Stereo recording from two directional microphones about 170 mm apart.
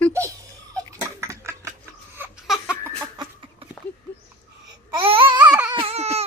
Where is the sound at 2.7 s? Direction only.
10° left (ahead or behind).